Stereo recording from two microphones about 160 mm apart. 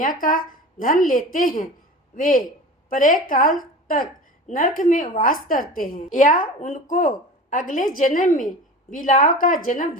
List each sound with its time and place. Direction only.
0.0 s a woman's voice: 60° left (ahead or behind)